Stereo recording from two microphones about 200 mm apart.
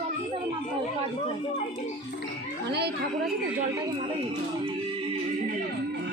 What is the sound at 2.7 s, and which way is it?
Speech, 55° right (ahead or behind).